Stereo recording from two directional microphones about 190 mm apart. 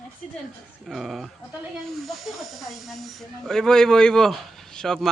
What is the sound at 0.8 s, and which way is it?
Speech, centre (ahead or behind).